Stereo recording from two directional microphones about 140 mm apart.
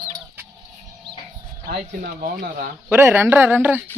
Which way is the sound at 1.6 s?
85° right.